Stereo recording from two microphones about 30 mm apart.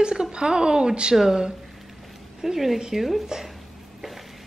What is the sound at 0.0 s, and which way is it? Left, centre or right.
A woman's voice, right.